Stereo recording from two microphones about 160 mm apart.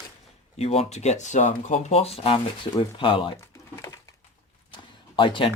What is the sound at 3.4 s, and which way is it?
Typing, 20° left (ahead or behind).